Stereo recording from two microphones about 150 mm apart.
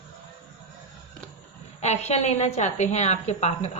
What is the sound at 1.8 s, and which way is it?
A woman's voice, 45° left (ahead or behind).